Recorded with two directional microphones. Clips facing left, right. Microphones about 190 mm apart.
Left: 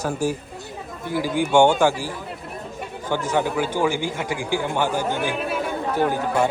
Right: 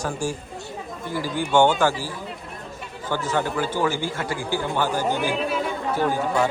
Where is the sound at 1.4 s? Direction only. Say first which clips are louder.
Left 2 dB; 10° left (ahead or behind).